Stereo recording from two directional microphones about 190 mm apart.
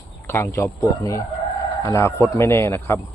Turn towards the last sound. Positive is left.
turn(degrees=15)  # may be behind; listen again after turning